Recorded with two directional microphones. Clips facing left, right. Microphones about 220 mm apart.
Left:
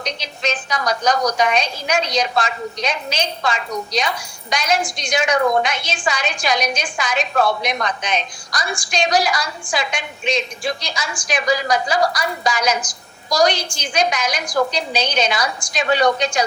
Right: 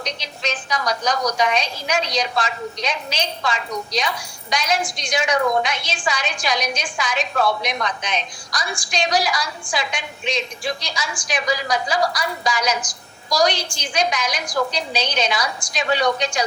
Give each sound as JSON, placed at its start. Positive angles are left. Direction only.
{"t": 0.4, "sound": "a woman's voice", "side_deg": 50}